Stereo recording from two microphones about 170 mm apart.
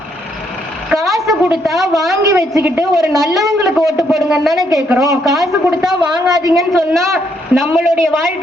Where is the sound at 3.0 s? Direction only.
Centre (ahead or behind).